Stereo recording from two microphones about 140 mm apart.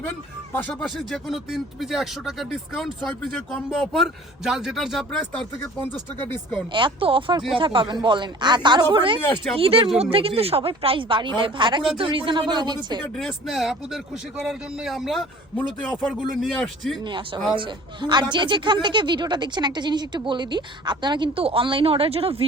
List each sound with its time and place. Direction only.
0.8 s speech: centre (ahead or behind)
3.2 s speech: 10° left (ahead or behind)
5.5 s speech: 15° left (ahead or behind)
6.7 s a man's voice: 35° right (ahead or behind)
13.1 s speech: centre (ahead or behind)
17.0 s a man's voice: 35° right (ahead or behind)